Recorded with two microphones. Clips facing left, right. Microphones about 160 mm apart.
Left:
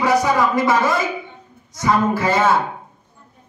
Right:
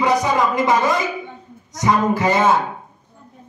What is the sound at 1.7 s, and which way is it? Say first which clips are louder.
Speech: even; 20° right (ahead or behind).